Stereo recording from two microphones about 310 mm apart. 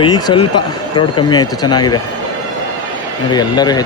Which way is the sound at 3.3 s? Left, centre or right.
Centre.